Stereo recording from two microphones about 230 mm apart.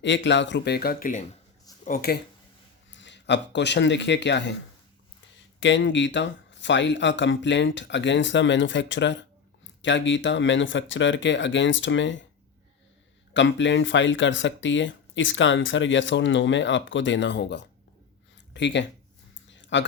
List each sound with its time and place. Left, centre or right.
0.0 s speech: left
2.9 s speech: left
5.5 s speech: left
13.3 s speech: left
19.5 s a sound: left